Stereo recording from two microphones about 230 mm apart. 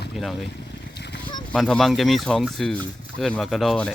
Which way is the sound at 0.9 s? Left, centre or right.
Left.